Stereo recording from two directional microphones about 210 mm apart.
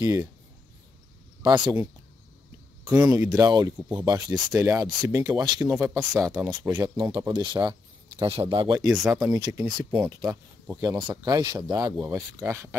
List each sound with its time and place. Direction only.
0.0 s speech: 15° right (ahead or behind)
1.4 s speech: 15° right (ahead or behind)
3.1 s speech: 15° right (ahead or behind)
5.7 s speech: 5° right (ahead or behind)